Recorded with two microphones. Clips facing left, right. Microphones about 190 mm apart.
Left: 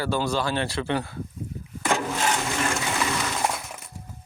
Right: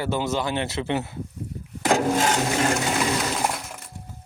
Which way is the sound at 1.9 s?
40° right (ahead or behind).